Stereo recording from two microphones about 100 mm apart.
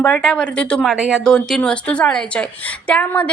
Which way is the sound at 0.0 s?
10° left (ahead or behind).